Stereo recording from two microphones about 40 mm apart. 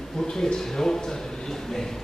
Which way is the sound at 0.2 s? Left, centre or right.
Centre.